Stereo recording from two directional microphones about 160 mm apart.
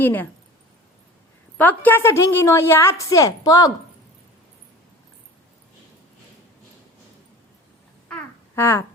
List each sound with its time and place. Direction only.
0.0 s a woman's voice: 10° left (ahead or behind)
1.5 s a woman's voice: 10° left (ahead or behind)
8.0 s babbling: 15° left (ahead or behind)